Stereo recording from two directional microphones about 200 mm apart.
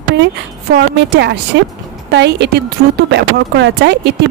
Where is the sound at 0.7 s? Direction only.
55° right (ahead or behind).